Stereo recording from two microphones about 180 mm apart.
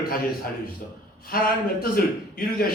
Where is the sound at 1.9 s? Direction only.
55° left (ahead or behind).